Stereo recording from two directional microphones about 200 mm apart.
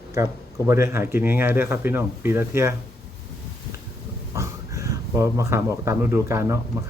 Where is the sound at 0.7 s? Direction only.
15° right (ahead or behind).